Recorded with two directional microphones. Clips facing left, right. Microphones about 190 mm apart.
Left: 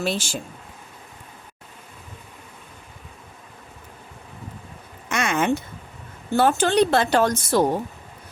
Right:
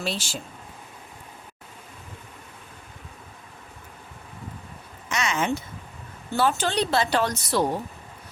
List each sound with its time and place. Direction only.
0.0 s speech: 50° left (ahead or behind)
5.0 s a sound: 55° left (ahead or behind)
6.3 s speech: 50° left (ahead or behind)